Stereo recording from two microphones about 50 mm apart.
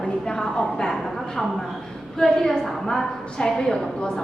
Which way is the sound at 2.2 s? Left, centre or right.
Centre.